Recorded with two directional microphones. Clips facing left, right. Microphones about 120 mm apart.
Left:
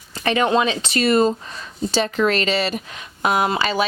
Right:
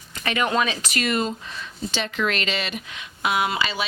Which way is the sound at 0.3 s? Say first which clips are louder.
Left 5 dB; 30° left (ahead or behind).